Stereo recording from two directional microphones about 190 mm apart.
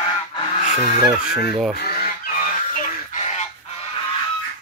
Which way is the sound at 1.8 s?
50° left (ahead or behind).